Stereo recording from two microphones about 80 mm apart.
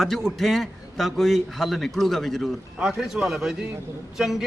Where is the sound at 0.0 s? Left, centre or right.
Centre.